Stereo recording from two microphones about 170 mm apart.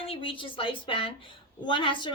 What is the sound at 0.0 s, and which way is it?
A woman's voice, 30° left (ahead or behind).